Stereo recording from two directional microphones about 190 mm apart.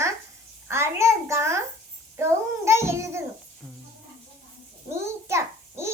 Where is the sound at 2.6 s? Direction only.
15° right (ahead or behind).